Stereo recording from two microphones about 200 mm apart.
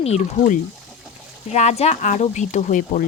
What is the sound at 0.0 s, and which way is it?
Speech, 35° left (ahead or behind).